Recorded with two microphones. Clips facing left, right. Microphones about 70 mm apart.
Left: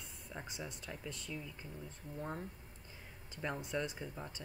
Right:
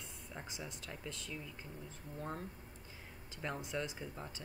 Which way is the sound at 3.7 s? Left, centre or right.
Centre.